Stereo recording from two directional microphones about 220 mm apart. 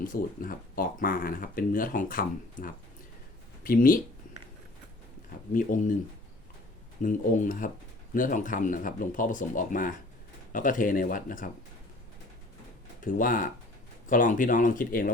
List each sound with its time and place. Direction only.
0.0 s speech: 40° left (ahead or behind)
5.5 s speech: 40° left (ahead or behind)
7.0 s speech: 35° left (ahead or behind)
13.0 s speech: 40° left (ahead or behind)